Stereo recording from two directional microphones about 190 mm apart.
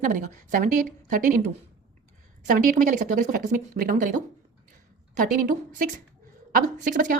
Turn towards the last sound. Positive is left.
turn(degrees=-45)  # may be behind; listen again after turning